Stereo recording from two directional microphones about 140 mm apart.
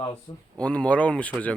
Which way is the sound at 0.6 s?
10° left (ahead or behind).